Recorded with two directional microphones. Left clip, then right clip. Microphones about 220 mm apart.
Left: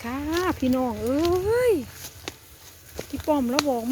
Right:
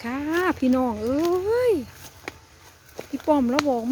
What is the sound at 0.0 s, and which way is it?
Speech, 10° right (ahead or behind).